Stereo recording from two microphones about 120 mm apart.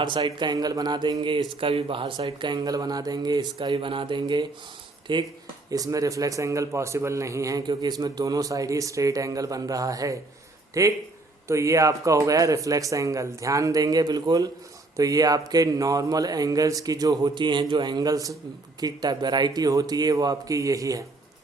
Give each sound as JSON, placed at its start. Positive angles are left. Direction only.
{"t": 0.0, "sound": "speech", "side_deg": -40}
{"t": 5.7, "sound": "a man's voice", "side_deg": -30}